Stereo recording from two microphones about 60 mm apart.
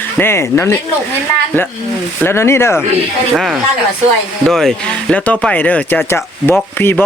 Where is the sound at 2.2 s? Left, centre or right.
Left.